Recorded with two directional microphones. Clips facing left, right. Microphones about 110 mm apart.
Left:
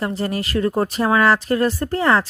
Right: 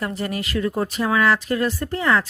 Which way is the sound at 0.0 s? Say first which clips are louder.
Left 3 dB; 30° left (ahead or behind).